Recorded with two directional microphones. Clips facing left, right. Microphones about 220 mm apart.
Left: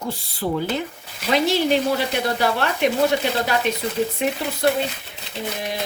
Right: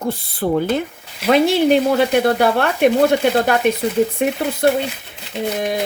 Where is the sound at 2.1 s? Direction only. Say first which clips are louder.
Right 7 dB; 55° right (ahead or behind).